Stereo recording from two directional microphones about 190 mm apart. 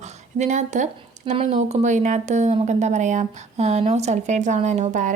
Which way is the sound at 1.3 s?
35° right (ahead or behind).